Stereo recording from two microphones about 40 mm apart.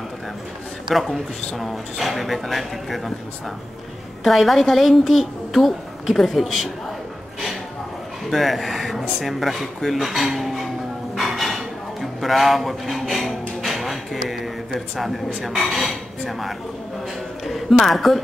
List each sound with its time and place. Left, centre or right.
0.8 s speech: centre
4.2 s speech: centre
8.3 s speech: centre
11.1 s a sound: centre
13.1 s music: centre
15.4 s speech: centre